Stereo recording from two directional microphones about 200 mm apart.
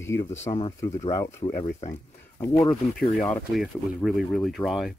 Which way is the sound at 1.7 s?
40° left (ahead or behind).